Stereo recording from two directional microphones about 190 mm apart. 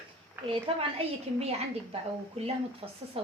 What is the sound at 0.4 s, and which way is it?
A woman's voice, 30° right (ahead or behind).